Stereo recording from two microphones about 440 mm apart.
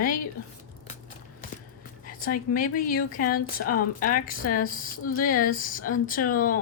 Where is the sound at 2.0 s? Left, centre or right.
Centre.